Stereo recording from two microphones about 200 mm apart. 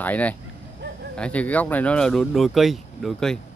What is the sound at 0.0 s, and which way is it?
Speech, 5° left (ahead or behind).